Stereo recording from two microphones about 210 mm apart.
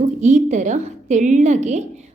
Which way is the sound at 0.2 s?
35° right (ahead or behind).